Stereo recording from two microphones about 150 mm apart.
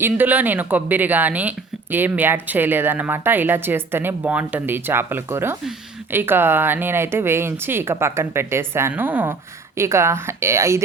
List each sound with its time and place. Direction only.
0.0 s speech: 10° right (ahead or behind)